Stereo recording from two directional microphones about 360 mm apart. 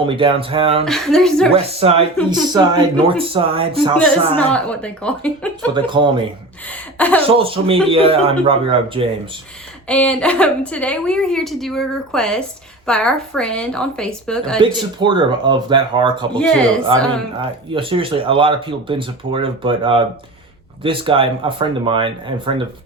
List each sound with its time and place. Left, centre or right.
0.0 s speech: centre
0.9 s a woman's voice: centre
1.5 s speech: centre
4.4 s a woman's voice: centre
5.7 s speech: centre
6.7 s speech: centre
7.3 s speech: centre
9.8 s a woman's voice: centre
14.6 s speech: centre
16.3 s a woman's voice: centre
17.7 s speech: centre